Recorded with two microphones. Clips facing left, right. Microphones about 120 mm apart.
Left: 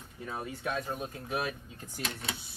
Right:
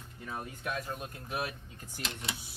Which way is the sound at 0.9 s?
Centre (ahead or behind).